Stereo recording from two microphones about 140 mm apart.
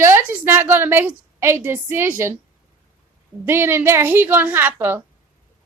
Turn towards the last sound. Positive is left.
turn(degrees=-15)  # may be behind; listen again after turning